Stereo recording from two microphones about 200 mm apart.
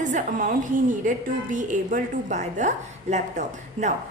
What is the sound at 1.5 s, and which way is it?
A woman's voice, 40° right (ahead or behind).